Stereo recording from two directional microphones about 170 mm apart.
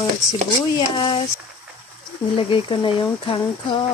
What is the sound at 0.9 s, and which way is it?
Speech, 25° left (ahead or behind).